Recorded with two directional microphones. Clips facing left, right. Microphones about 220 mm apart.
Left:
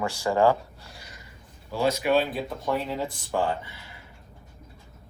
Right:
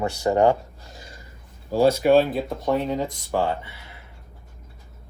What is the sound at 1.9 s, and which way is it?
Speech, 30° right (ahead or behind).